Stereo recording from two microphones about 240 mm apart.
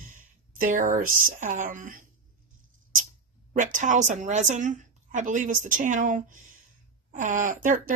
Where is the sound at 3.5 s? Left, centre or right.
Right.